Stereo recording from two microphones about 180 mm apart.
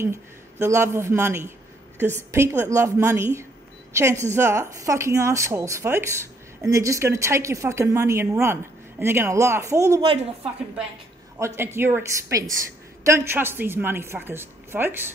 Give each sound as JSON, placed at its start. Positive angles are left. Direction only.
{"t": 0.0, "sound": "a woman's voice", "side_deg": -15}
{"t": 11.3, "sound": "a woman's voice", "side_deg": -15}